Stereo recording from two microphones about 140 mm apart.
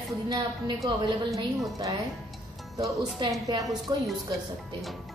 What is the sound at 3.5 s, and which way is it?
Speech, 30° right (ahead or behind).